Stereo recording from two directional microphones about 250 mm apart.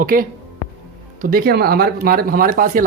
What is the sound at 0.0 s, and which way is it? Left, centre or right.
Speech, right.